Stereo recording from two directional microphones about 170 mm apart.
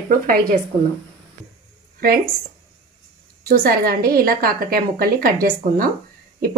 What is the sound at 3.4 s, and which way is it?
A woman's voice, 60° right (ahead or behind).